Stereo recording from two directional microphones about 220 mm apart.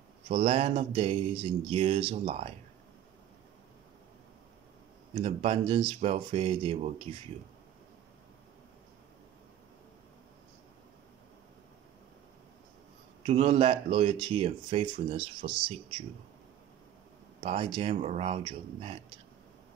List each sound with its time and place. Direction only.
0.3 s speech: 25° right (ahead or behind)
5.1 s speech: 25° right (ahead or behind)
13.2 s speech: 25° right (ahead or behind)
17.4 s speech: 25° right (ahead or behind)